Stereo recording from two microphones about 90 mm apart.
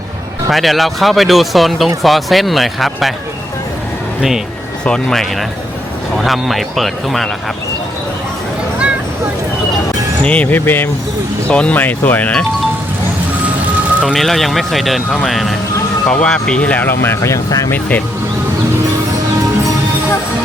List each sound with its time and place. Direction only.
0.5 s speech: centre (ahead or behind)
4.9 s speech: 5° left (ahead or behind)
10.2 s speech: 15° left (ahead or behind)
14.1 s speech: centre (ahead or behind); by 17.7 s 35° left (ahead or behind)
17.7 s speech: 15° left (ahead or behind)